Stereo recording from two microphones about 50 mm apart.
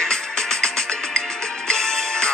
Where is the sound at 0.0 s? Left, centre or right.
Centre.